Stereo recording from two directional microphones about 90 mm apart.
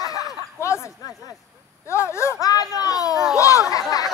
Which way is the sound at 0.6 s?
30° left (ahead or behind).